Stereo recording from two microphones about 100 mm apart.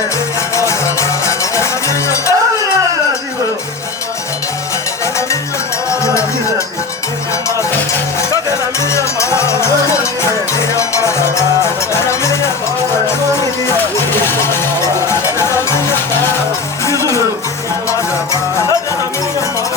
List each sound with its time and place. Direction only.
0.7 s music: 30° left (ahead or behind)
5.9 s cowbell: 30° left (ahead or behind)
9.0 s music: 30° left (ahead or behind)
14.1 s music: 25° left (ahead or behind)
17.0 s music: 35° right (ahead or behind)